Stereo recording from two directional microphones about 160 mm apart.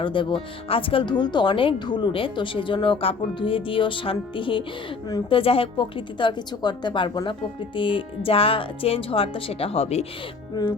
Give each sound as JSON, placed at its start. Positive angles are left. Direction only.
{"t": 0.0, "sound": "a woman's voice", "side_deg": 30}
{"t": 5.4, "sound": "speech", "side_deg": 35}
{"t": 10.5, "sound": "a woman's voice", "side_deg": 25}